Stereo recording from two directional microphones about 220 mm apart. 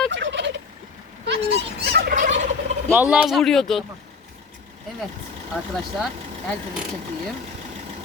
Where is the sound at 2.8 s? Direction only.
5° right (ahead or behind).